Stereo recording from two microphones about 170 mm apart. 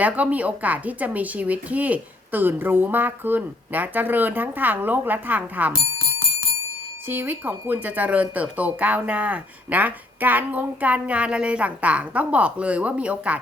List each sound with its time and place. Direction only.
0.0 s speech: 10° right (ahead or behind)
5.7 s bicycle bell: 20° left (ahead or behind)
7.1 s speech: 10° right (ahead or behind)